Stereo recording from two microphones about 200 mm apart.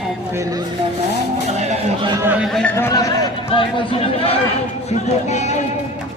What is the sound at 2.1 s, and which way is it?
A man's voice, 10° right (ahead or behind).